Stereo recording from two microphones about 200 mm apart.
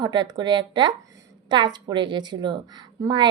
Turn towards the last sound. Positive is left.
turn(degrees=-20)  # may be behind; listen again after turning